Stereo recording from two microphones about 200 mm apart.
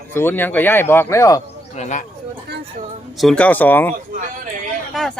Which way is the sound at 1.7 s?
35° left (ahead or behind).